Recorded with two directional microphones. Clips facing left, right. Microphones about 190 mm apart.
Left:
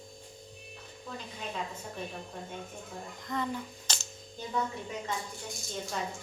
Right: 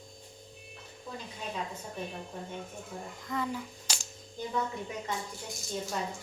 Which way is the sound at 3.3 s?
5° right (ahead or behind).